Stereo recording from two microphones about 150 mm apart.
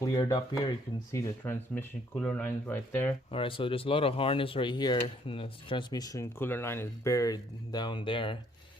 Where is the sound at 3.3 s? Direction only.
35° left (ahead or behind).